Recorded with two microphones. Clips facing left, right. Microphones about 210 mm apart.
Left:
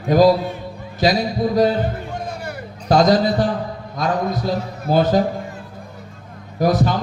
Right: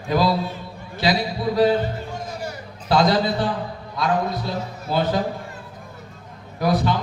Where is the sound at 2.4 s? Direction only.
45° left (ahead or behind).